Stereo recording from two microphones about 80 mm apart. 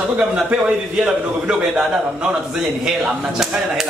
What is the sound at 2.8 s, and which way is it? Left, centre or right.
Speech, centre.